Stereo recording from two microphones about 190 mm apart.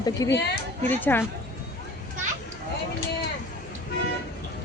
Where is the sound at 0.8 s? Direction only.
10° left (ahead or behind).